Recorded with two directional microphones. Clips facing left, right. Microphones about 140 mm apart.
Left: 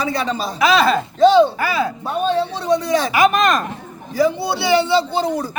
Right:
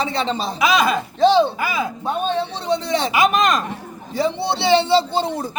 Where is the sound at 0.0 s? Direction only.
25° right (ahead or behind).